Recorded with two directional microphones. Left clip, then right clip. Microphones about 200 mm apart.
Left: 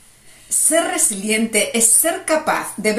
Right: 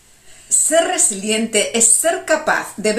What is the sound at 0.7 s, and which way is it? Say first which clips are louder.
Speech: right 2 dB; 5° right (ahead or behind).